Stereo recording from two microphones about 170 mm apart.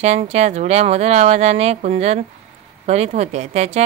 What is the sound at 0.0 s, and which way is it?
Speech, 40° right (ahead or behind).